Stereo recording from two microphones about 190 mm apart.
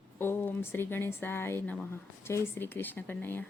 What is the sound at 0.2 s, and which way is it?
Speech, 10° left (ahead or behind).